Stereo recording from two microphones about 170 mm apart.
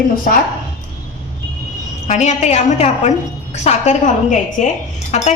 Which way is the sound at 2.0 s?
40° left (ahead or behind).